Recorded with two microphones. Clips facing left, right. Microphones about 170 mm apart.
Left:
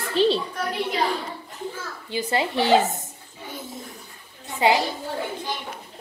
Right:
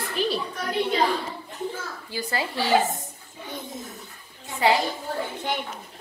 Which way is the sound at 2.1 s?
20° left (ahead or behind).